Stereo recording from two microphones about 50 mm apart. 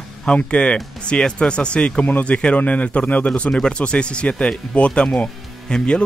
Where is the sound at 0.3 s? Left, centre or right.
Left.